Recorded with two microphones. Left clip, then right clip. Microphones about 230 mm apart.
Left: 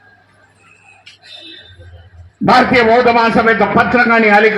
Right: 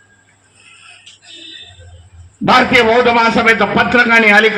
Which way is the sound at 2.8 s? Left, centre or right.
Left.